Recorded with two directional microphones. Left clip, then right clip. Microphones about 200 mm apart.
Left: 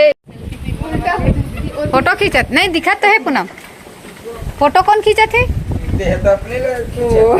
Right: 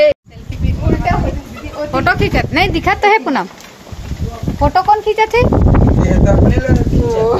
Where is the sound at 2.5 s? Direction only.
Centre (ahead or behind).